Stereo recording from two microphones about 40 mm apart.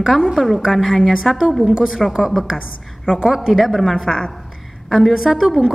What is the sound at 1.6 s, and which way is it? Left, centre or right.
Speech, centre.